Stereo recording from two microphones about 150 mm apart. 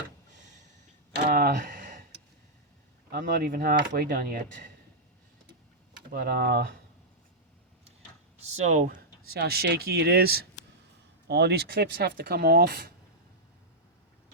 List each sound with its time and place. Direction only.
1.1 s a sound: 90° right; by 2.0 s 60° right (ahead or behind)
3.1 s speech: 80° right
6.1 s speech: 85° right
8.4 s speech: 50° right (ahead or behind)
9.3 s speech: 90° right